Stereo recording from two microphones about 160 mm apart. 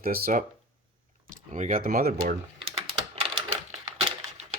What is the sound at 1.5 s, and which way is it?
Speech, 50° right (ahead or behind).